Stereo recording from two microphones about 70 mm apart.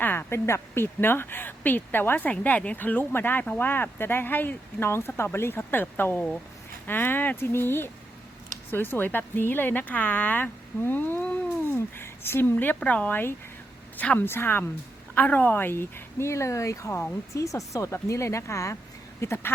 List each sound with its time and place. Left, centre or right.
0.0 s speech: left
11.9 s a woman's voice: left
15.1 s speech: left